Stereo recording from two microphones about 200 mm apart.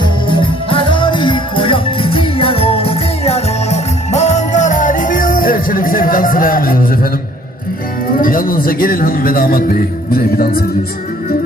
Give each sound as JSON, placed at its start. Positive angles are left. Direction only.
{"t": 0.3, "sound": "music", "side_deg": 25}
{"t": 8.0, "sound": "a man's voice", "side_deg": 45}